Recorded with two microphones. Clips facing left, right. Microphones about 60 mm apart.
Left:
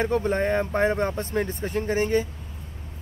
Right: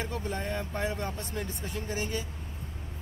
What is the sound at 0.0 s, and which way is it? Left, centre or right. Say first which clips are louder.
Speech: left 11 dB; left.